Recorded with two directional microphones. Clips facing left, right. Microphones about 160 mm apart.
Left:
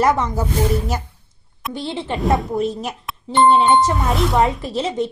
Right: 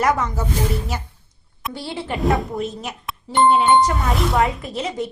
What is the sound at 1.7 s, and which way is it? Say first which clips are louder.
Speech: left 3 dB; 20° left (ahead or behind).